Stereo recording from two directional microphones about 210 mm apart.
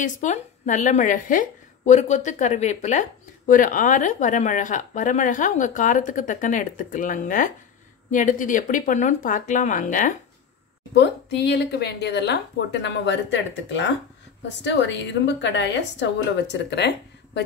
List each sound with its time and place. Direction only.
0.0 s a woman's voice: 35° left (ahead or behind)
11.0 s a woman's voice: 55° left (ahead or behind)